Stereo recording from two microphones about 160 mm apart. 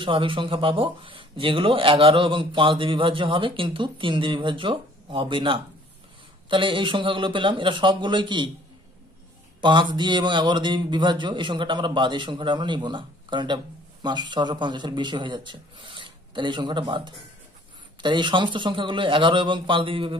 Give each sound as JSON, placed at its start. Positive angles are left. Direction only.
{"t": 0.0, "sound": "speech", "side_deg": -30}
{"t": 9.6, "sound": "a man's voice", "side_deg": -30}